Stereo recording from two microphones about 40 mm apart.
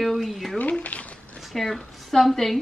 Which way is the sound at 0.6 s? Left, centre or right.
Left.